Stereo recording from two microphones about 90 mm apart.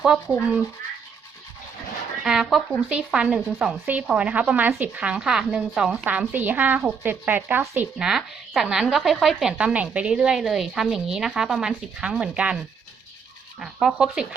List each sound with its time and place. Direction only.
0.0 s speech: 10° right (ahead or behind)
2.2 s speech: 5° right (ahead or behind); by 7.9 s 25° right (ahead or behind)
7.9 s speech: 5° right (ahead or behind)
13.6 s speech: 5° right (ahead or behind)